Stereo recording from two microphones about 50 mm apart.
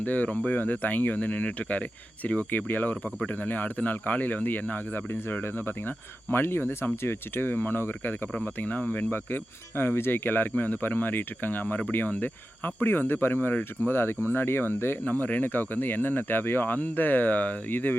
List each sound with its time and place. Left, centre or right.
0.0 s speech: left
8.6 s speech: left
13.9 s speech: left
15.2 s speech: left